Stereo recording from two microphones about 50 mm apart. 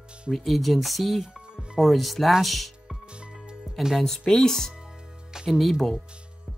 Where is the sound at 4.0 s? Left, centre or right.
Centre.